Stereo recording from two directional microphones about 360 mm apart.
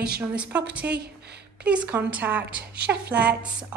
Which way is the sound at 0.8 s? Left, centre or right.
Right.